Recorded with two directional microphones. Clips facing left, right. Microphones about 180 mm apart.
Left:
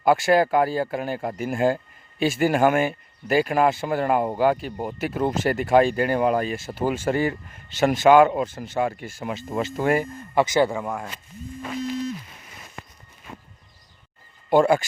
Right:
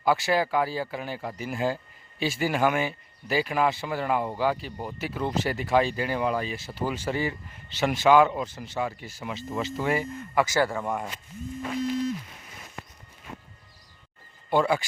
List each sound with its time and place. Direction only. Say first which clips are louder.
0.0 s speech: left 6 dB; 50° left (ahead or behind)
10.3 s speech: left 4 dB; 20° left (ahead or behind)
10.8 s speech: even; centre (ahead or behind)
14.5 s speech: left 6 dB; 45° left (ahead or behind)